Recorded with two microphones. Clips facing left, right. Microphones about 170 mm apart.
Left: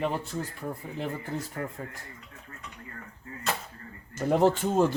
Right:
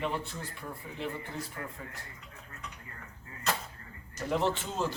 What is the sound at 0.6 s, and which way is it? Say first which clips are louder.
Speech: left 5 dB; 40° left (ahead or behind).